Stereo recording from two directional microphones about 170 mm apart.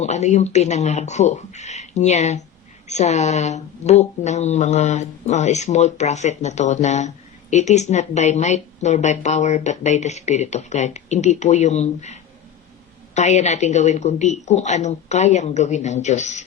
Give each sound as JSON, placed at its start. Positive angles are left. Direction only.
{"t": 0.0, "sound": "a woman's voice", "side_deg": 40}